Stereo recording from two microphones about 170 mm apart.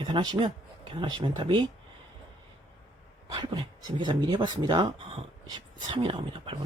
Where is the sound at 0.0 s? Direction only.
25° right (ahead or behind).